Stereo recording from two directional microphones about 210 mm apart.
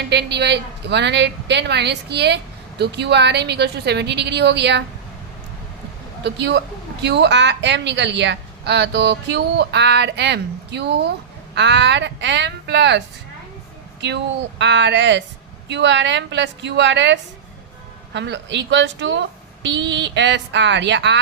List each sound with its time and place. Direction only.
0.1 s speech: 55° right (ahead or behind)
6.2 s speech: 55° right (ahead or behind)
14.6 s speech: 55° right (ahead or behind)